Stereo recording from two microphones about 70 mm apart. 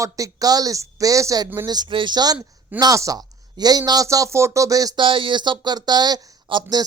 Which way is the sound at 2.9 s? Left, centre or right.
Right.